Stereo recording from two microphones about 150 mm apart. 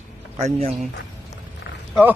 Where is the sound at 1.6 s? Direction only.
90° left.